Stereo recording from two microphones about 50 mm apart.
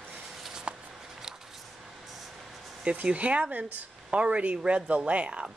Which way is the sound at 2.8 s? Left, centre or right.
Right.